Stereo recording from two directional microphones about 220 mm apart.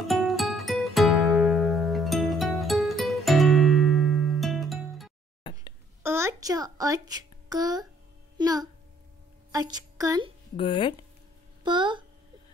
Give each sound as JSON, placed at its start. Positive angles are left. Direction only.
{"t": 0.0, "sound": "music", "side_deg": 0}
{"t": 5.4, "sound": "a sound", "side_deg": 25}
{"t": 6.0, "sound": "a woman's voice", "side_deg": -10}
{"t": 10.5, "sound": "speech", "side_deg": 25}
{"t": 11.6, "sound": "speech", "side_deg": -20}